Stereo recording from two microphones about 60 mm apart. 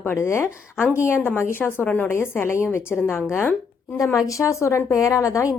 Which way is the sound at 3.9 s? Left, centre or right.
Left.